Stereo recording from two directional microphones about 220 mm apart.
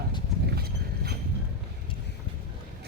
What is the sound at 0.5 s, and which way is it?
Clip-clop, 45° right (ahead or behind).